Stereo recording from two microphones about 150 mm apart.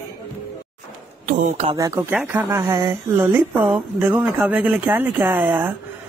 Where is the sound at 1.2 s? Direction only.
55° right (ahead or behind).